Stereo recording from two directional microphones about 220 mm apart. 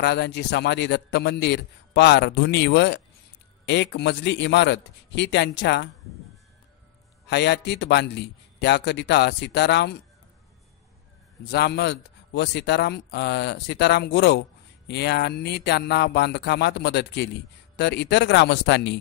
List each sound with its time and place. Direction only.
0.0 s a man's voice: 50° left (ahead or behind)
7.2 s a man's voice: 50° left (ahead or behind)
11.4 s a man's voice: 50° left (ahead or behind)